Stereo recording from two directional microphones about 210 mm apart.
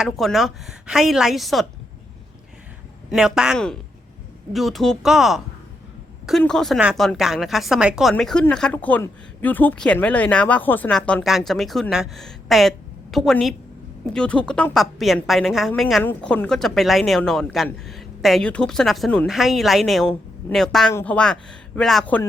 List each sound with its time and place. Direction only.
0.0 s a woman's voice: centre (ahead or behind)
3.1 s a woman's voice: 5° right (ahead or behind)